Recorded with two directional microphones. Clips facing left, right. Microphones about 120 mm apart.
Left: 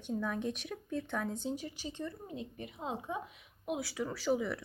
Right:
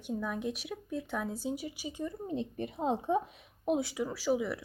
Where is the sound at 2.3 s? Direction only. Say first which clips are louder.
Right 8 dB; 35° right (ahead or behind).